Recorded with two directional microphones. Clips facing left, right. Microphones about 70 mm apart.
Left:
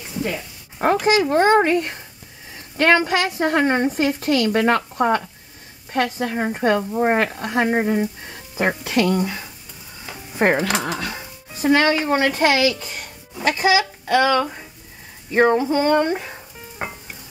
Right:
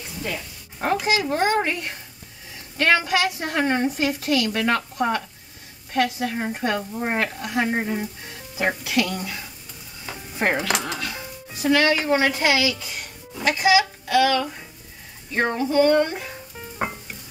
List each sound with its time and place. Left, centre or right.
0.2 s a woman's voice: left
7.6 s a woman's voice: left
11.6 s a woman's voice: left
16.8 s music: centre